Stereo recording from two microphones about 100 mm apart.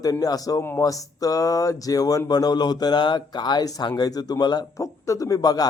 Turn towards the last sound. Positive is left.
turn(degrees=40)  # may be behind; listen again after turning